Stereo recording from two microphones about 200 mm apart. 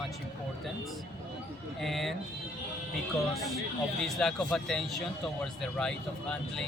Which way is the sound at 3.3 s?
Centre (ahead or behind).